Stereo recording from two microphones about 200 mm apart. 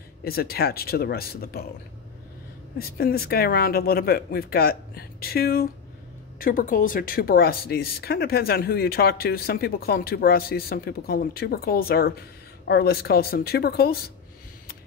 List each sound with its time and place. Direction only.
0.2 s speech: 50° left (ahead or behind)
2.8 s speech: 50° left (ahead or behind)